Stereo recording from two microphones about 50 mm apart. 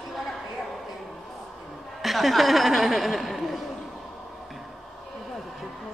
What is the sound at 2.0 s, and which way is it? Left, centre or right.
Speech, centre.